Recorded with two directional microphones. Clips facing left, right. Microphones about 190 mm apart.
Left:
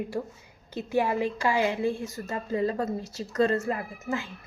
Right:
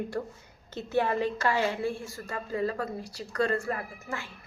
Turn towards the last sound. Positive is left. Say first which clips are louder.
# left 5 dB
turn(degrees=20)  # may be behind; listen again after turning